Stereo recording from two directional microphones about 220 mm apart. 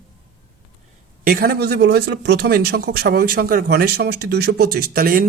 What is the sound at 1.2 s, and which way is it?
A man's voice, 40° right (ahead or behind).